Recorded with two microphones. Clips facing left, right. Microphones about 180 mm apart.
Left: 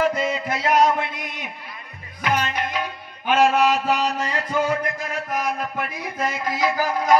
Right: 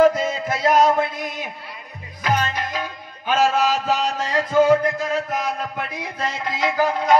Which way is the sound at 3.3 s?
35° right (ahead or behind).